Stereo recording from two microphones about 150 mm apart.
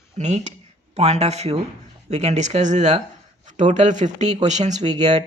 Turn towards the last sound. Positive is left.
turn(degrees=-50)  # may be behind; listen again after turning